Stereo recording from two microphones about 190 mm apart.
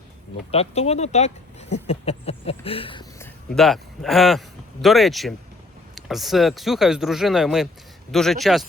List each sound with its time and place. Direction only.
0.5 s speech: 30° left (ahead or behind)
3.2 s a man's voice: centre (ahead or behind)